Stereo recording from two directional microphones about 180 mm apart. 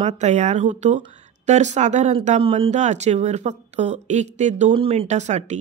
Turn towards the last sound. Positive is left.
turn(degrees=-40)  # may be behind; listen again after turning